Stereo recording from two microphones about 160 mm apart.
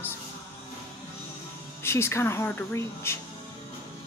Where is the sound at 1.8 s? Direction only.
15° left (ahead or behind).